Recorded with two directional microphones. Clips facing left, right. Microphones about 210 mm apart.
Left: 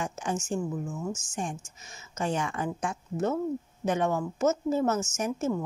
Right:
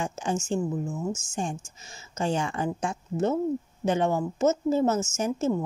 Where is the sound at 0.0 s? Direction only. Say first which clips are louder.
Right 3 dB; 25° right (ahead or behind).